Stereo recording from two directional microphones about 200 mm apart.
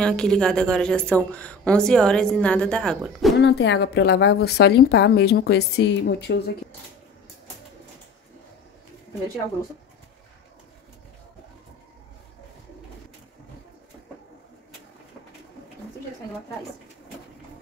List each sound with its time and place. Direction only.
0.0 s a woman's voice: 5° left (ahead or behind)
3.3 s a woman's voice: 60° left (ahead or behind)